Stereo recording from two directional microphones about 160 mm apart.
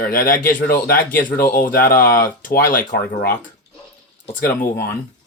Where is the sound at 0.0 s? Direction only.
60° left (ahead or behind).